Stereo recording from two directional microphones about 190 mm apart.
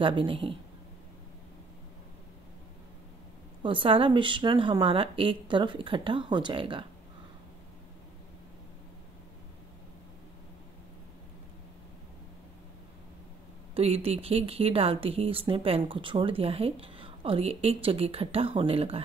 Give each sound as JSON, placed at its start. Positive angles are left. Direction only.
{"t": 0.0, "sound": "speech", "side_deg": -25}
{"t": 3.6, "sound": "speech", "side_deg": -25}
{"t": 13.7, "sound": "speech", "side_deg": -30}